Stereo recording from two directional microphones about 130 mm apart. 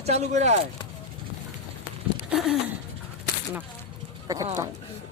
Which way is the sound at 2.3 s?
5° right (ahead or behind).